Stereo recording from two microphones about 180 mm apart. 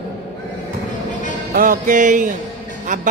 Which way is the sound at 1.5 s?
50° right (ahead or behind).